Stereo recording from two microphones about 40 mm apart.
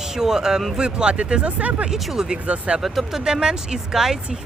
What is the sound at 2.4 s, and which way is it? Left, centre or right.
Speech, right.